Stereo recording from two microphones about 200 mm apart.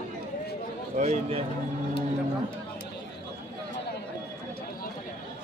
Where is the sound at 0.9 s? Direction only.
35° right (ahead or behind).